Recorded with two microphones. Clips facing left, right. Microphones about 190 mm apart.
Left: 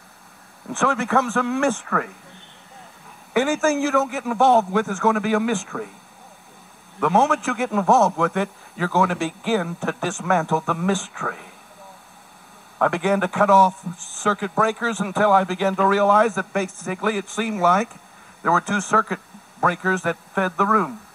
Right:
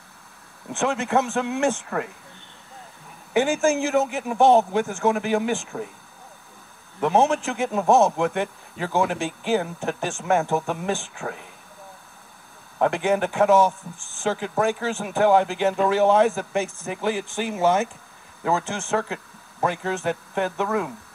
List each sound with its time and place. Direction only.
0.7 s a man's voice: 20° right (ahead or behind)
3.3 s a man's voice: 20° right (ahead or behind)
7.0 s a man's voice: 25° right (ahead or behind)
12.7 s a man's voice: 25° right (ahead or behind)